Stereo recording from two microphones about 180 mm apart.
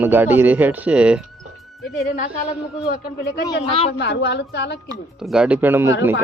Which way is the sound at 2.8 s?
60° left (ahead or behind).